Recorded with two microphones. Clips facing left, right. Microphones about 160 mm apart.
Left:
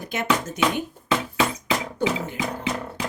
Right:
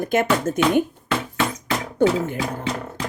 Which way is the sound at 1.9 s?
50° right (ahead or behind).